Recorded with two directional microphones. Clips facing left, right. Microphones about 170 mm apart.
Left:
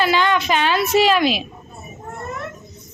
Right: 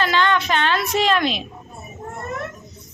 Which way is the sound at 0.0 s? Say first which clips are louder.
Left 2 dB; 10° left (ahead or behind).